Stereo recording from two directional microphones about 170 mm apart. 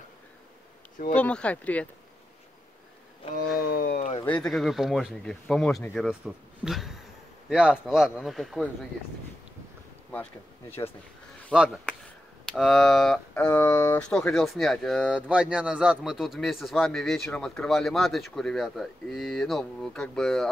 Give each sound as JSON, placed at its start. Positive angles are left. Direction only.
{"t": 1.1, "sound": "speech", "side_deg": 5}
{"t": 3.5, "sound": "a sound", "side_deg": 60}
{"t": 4.2, "sound": "speech", "side_deg": 5}
{"t": 11.5, "sound": "speech", "side_deg": -5}